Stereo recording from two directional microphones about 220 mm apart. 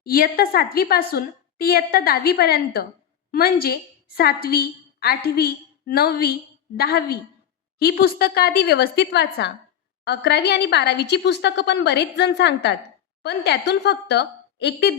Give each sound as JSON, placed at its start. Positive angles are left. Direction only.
{"t": 0.0, "sound": "a woman's voice", "side_deg": 45}